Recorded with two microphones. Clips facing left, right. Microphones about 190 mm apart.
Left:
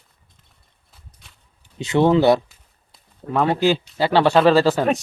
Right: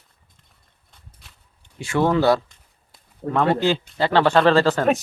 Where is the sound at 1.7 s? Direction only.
20° left (ahead or behind).